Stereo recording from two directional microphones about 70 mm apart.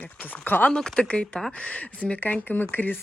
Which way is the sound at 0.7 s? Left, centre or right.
Centre.